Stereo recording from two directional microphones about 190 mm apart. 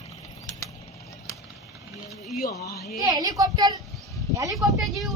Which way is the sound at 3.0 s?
20° right (ahead or behind).